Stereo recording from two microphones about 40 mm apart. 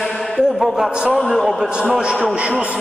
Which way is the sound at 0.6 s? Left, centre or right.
Centre.